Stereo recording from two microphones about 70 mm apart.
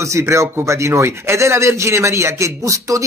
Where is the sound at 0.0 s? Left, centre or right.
Right.